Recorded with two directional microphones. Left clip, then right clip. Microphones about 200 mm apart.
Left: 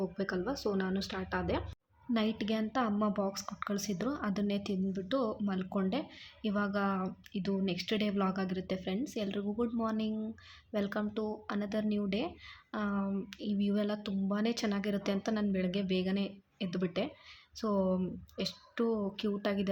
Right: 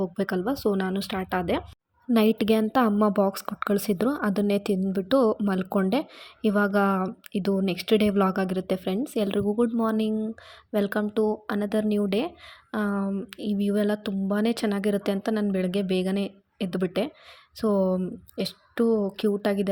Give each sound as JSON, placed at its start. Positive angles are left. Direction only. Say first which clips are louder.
{"t": 0.0, "sound": "a woman's voice", "louder": "right 8 dB", "side_deg": -35}